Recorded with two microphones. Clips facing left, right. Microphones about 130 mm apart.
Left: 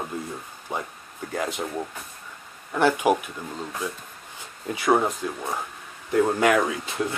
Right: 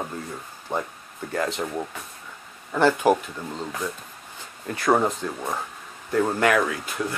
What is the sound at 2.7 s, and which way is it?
Speech, 10° left (ahead or behind).